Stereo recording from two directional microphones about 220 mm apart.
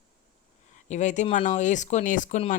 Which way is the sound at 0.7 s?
35° left (ahead or behind).